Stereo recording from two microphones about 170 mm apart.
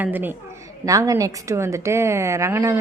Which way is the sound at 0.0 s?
10° right (ahead or behind).